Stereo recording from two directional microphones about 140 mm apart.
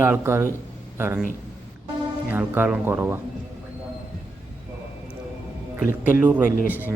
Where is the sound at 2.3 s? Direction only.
15° right (ahead or behind).